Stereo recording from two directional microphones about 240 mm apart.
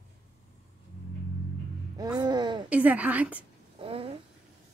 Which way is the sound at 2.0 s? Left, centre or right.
Centre.